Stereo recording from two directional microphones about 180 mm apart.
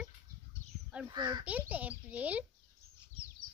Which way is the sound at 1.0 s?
25° right (ahead or behind).